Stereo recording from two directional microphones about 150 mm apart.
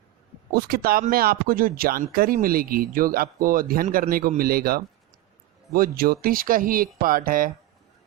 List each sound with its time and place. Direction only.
0.5 s a man's voice: 85° right; by 7.5 s 70° right (ahead or behind)